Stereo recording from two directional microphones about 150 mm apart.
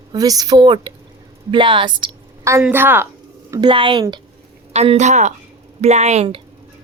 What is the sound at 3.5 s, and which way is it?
Speech, 30° right (ahead or behind).